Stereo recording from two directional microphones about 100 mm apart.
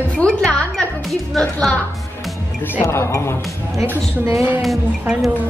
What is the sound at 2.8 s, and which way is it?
Speech, 30° left (ahead or behind).